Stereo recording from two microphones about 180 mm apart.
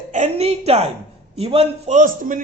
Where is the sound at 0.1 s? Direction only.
40° right (ahead or behind).